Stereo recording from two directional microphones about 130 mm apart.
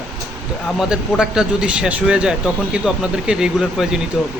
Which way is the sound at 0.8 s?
5° right (ahead or behind).